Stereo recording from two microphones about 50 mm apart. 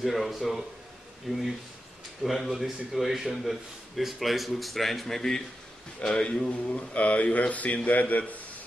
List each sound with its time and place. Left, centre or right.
0.0 s a man's voice: centre; by 8.4 s left